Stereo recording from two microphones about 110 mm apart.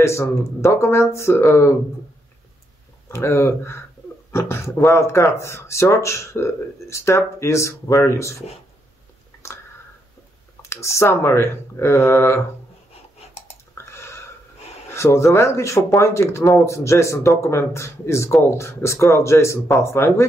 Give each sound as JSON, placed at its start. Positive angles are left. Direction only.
{"t": 0.0, "sound": "speech", "side_deg": 25}
{"t": 3.1, "sound": "speech", "side_deg": 25}
{"t": 10.6, "sound": "speech", "side_deg": 25}
{"t": 13.7, "sound": "a sound", "side_deg": 25}
{"t": 15.0, "sound": "speech", "side_deg": 25}